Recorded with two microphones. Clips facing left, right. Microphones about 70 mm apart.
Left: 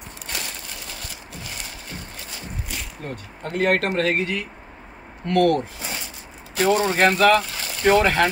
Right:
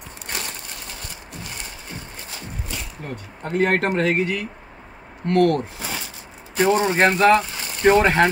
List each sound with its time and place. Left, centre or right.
3.4 s speech: right